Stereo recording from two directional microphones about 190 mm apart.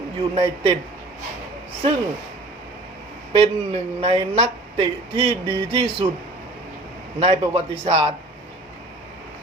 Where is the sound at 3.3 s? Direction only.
30° right (ahead or behind).